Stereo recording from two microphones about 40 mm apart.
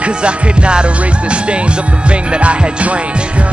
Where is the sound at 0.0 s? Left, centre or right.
Right.